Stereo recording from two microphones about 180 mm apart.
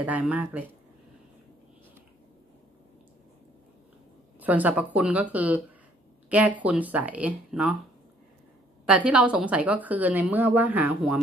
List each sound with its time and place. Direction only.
0.0 s a woman's voice: 10° right (ahead or behind)
4.4 s a woman's voice: 10° right (ahead or behind)
8.8 s a woman's voice: 5° right (ahead or behind)